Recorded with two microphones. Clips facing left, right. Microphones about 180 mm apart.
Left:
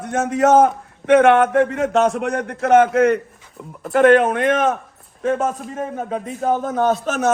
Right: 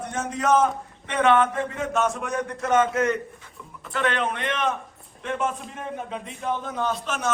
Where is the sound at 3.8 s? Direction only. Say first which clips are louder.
Left 13 dB; 50° left (ahead or behind).